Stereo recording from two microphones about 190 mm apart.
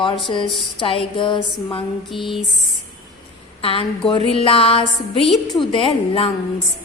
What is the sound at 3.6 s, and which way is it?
A woman's voice, 30° left (ahead or behind).